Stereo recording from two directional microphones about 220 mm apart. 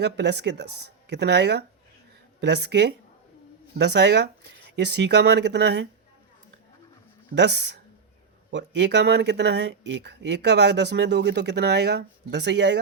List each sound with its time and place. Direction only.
0.0 s speech: 50° right (ahead or behind)
7.3 s speech: 50° right (ahead or behind)